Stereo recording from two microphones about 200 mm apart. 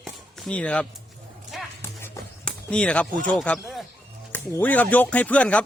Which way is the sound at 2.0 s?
10° left (ahead or behind).